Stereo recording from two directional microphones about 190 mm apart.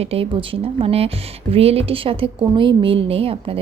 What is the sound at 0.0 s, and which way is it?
A woman's voice, 30° right (ahead or behind).